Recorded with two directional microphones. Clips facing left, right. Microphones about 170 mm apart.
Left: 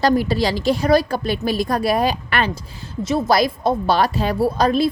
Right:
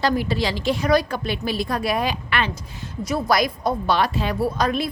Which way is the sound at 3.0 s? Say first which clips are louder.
Left 4 dB; 25° left (ahead or behind).